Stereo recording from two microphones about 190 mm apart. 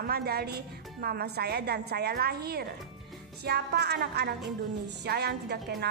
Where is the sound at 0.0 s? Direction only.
55° right (ahead or behind).